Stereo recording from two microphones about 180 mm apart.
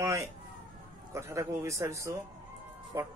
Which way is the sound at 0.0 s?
15° right (ahead or behind).